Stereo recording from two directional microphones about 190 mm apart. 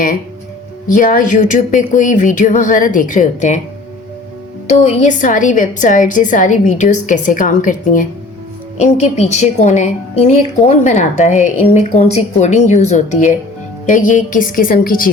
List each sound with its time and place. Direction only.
0.9 s a woman's voice: 45° left (ahead or behind)
4.7 s a woman's voice: 35° left (ahead or behind)